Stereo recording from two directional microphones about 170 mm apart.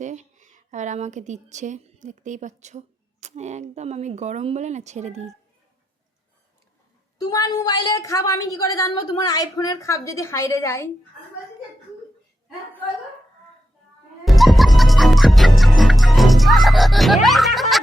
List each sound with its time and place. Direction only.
0.0 s speech: 45° right (ahead or behind)
7.3 s a woman's voice: 20° left (ahead or behind)
14.3 s music: centre (ahead or behind)
17.2 s snicker: centre (ahead or behind)